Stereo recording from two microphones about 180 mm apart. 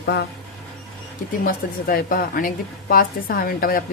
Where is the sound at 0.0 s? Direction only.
70° left (ahead or behind).